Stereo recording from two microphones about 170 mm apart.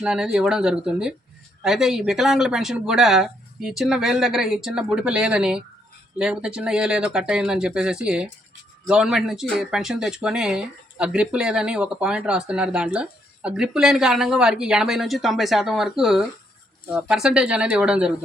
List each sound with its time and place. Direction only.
0.0 s speech: 5° right (ahead or behind)